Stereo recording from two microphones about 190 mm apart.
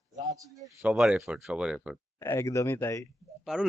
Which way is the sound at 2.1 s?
15° left (ahead or behind).